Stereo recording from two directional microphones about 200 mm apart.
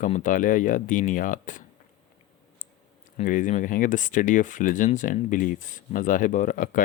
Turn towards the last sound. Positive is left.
turn(degrees=45)  # may be behind; listen again after turning